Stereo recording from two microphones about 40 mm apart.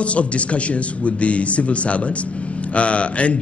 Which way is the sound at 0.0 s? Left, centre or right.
Left.